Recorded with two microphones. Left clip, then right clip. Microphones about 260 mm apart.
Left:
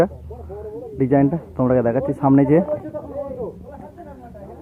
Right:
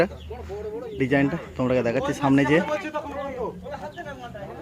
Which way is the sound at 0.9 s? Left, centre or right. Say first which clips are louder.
Left 5 dB; centre.